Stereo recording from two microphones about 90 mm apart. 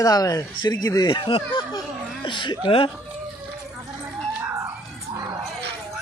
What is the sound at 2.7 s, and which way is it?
Speech, 90° left.